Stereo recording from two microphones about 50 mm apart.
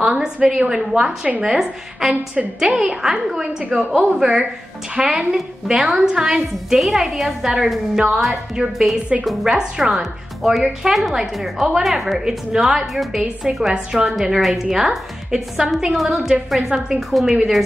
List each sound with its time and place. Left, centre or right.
0.0 s a sound: right
0.5 s a woman's voice: centre
9.2 s a woman's voice: centre
11.8 s a woman's voice: centre
16.6 s a woman's voice: centre